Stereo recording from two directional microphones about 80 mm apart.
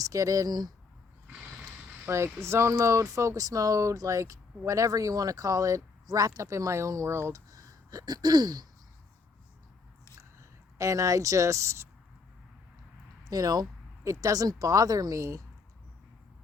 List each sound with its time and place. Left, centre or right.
0.0 s speech: right
1.3 s a sound: centre
2.0 s speech: right
10.8 s speech: right
13.2 s speech: right